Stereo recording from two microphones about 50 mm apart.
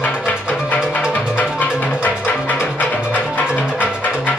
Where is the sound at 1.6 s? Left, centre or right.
Left.